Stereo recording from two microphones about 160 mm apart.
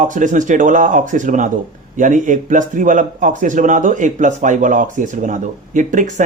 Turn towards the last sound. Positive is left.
turn(degrees=-55)  # may be behind; listen again after turning